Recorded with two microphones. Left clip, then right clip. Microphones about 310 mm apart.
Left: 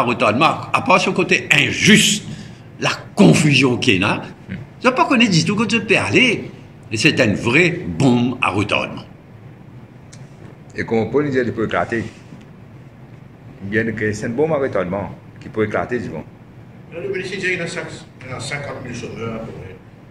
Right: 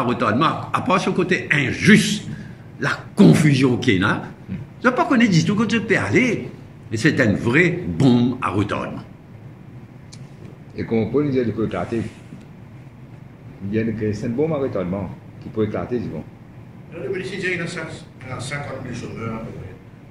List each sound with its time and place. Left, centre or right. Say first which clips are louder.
0.0 s a man's voice: left 4 dB; centre
10.8 s speech: left 3 dB; left
13.7 s speech: left 4 dB; left
14.2 s speech: left 4 dB; left
15.7 s speech: left 4 dB; left
17.1 s a man's voice: left 3 dB; centre